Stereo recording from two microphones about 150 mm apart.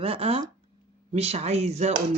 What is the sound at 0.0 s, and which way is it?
Speech, 40° right (ahead or behind).